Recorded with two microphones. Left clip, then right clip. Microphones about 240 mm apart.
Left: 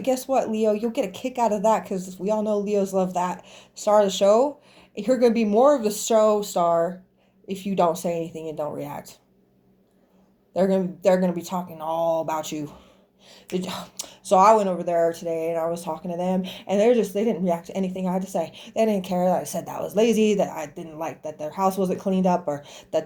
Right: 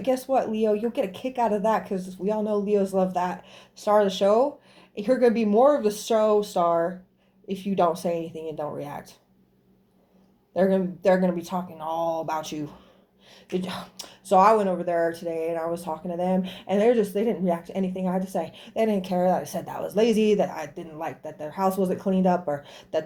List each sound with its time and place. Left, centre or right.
0.0 s speech: left
10.5 s speech: left